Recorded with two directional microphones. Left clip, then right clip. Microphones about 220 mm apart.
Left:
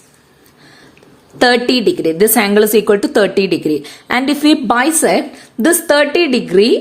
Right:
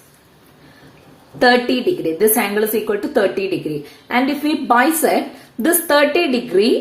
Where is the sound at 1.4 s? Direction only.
45° left (ahead or behind).